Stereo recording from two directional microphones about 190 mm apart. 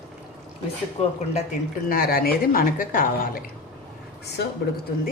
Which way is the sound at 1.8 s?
50° left (ahead or behind).